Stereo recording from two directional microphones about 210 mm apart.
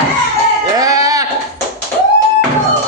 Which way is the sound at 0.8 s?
15° right (ahead or behind).